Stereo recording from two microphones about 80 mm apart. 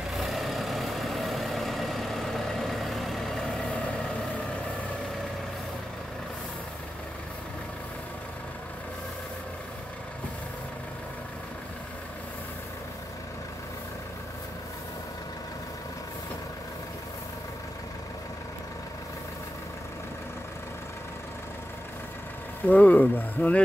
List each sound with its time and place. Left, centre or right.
0.1 s vehicle: centre
22.7 s speech: left